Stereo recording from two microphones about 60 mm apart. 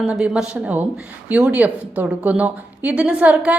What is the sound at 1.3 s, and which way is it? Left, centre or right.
A woman's voice, right.